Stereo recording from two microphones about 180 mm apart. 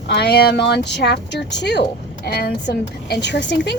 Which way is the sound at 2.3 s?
60° left (ahead or behind).